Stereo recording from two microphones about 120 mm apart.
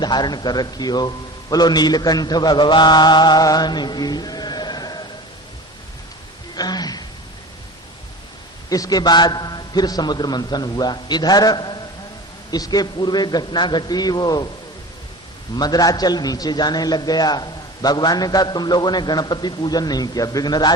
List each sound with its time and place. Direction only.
0.0 s a man's voice: 35° left (ahead or behind)
6.6 s a sound: 35° left (ahead or behind)
8.7 s a man's voice: 30° left (ahead or behind)
15.5 s a man's voice: 35° left (ahead or behind)